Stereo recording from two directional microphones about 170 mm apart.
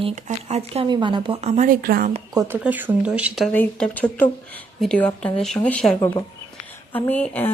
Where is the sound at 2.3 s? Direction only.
20° right (ahead or behind).